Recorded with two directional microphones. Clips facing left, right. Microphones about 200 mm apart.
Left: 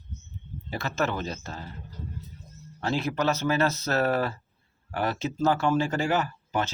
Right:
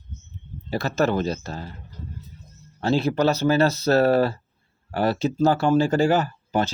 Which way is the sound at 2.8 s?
30° right (ahead or behind).